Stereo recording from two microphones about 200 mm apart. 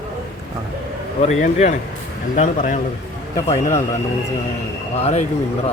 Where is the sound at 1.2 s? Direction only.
35° left (ahead or behind).